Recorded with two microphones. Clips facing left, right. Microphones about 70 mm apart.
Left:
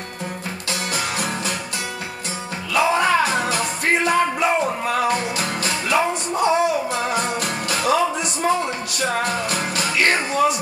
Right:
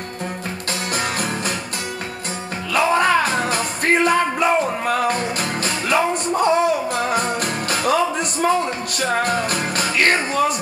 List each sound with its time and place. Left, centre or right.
0.9 s music: right
2.7 s music: right
9.2 s music: right